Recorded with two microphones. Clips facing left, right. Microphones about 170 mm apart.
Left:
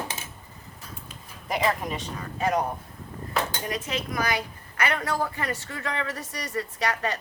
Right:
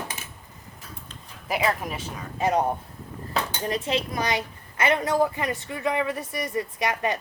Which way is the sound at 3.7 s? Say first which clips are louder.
Right 4 dB; 30° right (ahead or behind).